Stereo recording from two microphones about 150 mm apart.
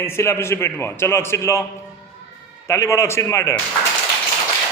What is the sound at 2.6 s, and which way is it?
Speech, 20° left (ahead or behind).